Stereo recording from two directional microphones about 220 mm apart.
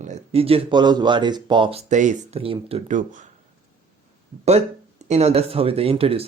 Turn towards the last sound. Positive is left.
turn(degrees=-25)  # may be behind; listen again after turning